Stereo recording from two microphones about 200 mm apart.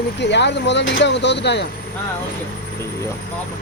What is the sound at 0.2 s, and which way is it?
Speech, 60° left (ahead or behind).